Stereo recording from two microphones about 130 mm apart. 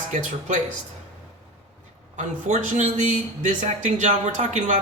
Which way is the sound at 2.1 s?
70° right (ahead or behind).